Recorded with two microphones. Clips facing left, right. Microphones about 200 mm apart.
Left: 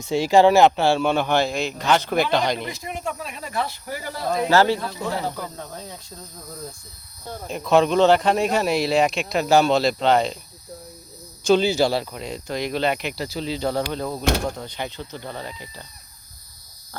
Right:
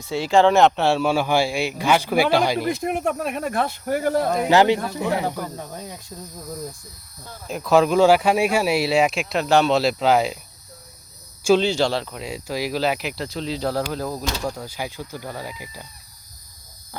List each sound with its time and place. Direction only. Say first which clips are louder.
0.0 s speech: left 1 dB; 15° left (ahead or behind)
0.5 s speech: left 1 dB; centre (ahead or behind)
2.6 s speech: right 8 dB; 55° right (ahead or behind)
4.4 s speech: even; 15° right (ahead or behind)
7.4 s speech: right 1 dB; 5° right (ahead or behind)
11.4 s speech: even; centre (ahead or behind)
12.2 s speech: right 1 dB; 5° right (ahead or behind)